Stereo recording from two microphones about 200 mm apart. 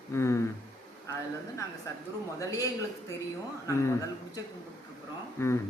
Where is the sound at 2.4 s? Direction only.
15° left (ahead or behind).